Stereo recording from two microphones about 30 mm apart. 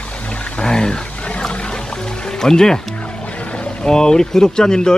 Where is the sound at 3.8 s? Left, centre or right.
Left.